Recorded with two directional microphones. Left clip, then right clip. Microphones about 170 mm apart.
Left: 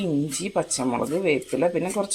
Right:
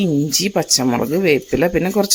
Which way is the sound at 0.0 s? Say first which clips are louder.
Right 8 dB; 50° right (ahead or behind).